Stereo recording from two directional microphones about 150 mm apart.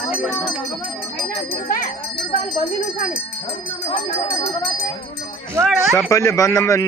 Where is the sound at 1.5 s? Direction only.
70° left (ahead or behind).